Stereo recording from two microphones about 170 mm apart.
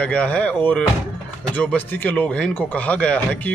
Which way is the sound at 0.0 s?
5° left (ahead or behind).